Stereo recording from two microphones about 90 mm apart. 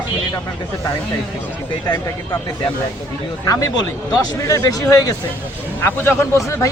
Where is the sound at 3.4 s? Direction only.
40° left (ahead or behind).